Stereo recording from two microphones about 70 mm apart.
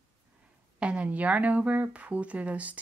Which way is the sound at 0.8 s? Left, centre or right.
Centre.